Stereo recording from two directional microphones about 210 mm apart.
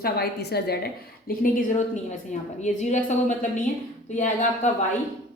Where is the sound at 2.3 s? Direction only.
35° left (ahead or behind).